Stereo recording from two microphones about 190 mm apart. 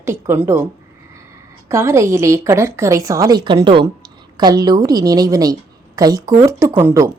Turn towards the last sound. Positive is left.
turn(degrees=-15)  # may be behind; listen again after turning